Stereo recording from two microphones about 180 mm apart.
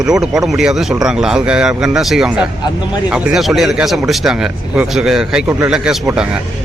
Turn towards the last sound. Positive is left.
turn(degrees=-5)  # may be behind; listen again after turning